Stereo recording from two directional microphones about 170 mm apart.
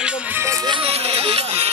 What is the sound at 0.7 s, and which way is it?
Music, 35° right (ahead or behind).